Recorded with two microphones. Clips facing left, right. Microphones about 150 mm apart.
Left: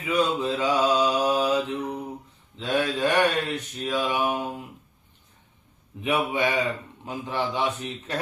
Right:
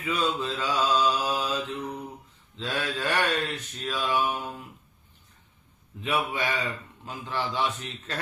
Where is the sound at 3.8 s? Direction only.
20° left (ahead or behind).